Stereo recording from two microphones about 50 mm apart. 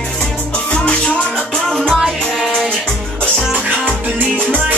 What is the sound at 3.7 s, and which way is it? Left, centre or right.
Music, left.